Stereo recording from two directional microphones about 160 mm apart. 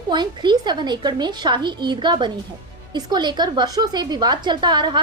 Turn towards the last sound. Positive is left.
turn(degrees=-30)  # may be behind; listen again after turning